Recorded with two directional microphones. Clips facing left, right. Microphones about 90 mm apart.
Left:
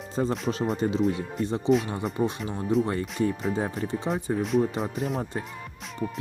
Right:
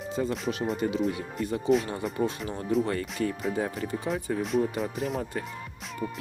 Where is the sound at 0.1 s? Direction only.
35° left (ahead or behind).